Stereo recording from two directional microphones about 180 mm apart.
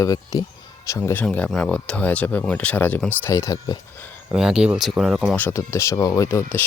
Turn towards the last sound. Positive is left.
turn(degrees=15)  # may be behind; listen again after turning